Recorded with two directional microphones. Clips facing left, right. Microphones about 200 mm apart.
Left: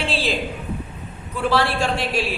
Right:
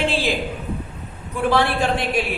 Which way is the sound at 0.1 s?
15° right (ahead or behind).